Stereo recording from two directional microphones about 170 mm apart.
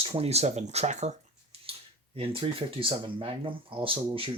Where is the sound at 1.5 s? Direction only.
35° right (ahead or behind).